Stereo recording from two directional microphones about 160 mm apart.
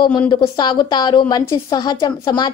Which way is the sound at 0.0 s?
30° left (ahead or behind).